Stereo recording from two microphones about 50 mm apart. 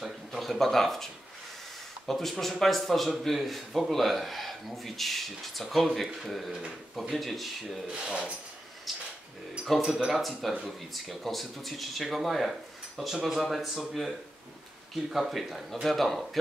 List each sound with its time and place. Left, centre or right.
0.0 s speech: centre
7.9 s speech: centre
8.9 s a sound: centre
9.8 s speech: centre